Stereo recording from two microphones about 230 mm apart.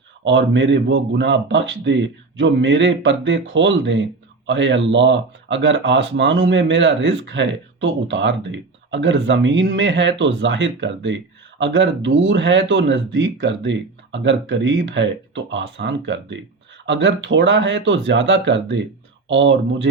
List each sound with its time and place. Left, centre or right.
0.3 s speech: right